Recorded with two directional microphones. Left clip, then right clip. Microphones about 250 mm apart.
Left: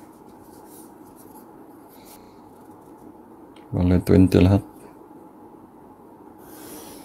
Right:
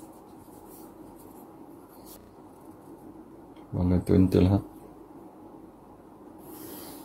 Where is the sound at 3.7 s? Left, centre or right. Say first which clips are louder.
Left 6 dB; left.